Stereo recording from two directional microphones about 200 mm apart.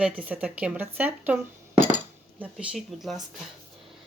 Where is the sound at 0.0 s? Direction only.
5° right (ahead or behind).